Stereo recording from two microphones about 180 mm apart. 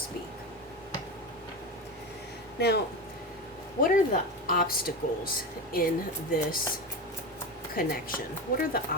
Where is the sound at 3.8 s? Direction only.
50° left (ahead or behind).